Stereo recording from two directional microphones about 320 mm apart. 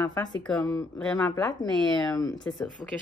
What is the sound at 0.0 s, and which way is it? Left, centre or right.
A woman's voice, centre.